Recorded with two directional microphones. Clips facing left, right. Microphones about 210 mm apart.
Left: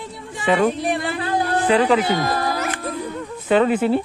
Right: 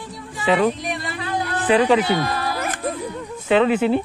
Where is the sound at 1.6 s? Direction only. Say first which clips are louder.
Right 1 dB; 10° right (ahead or behind).